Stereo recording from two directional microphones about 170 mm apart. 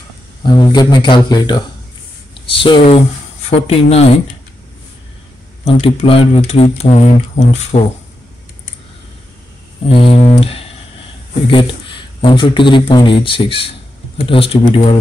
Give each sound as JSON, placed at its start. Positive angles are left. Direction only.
{"t": 0.5, "sound": "speech", "side_deg": 25}
{"t": 5.7, "sound": "speech", "side_deg": 35}
{"t": 9.8, "sound": "speech", "side_deg": 35}